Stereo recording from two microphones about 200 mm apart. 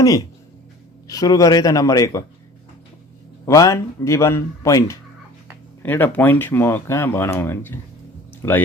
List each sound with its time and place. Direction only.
0.0 s speech: 15° left (ahead or behind)
3.4 s speech: 15° left (ahead or behind)
8.3 s music: 10° left (ahead or behind)